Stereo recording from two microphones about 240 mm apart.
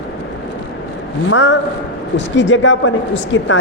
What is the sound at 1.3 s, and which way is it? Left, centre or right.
A man's voice, left.